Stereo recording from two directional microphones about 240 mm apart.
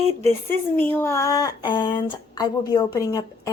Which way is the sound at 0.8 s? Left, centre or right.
Centre.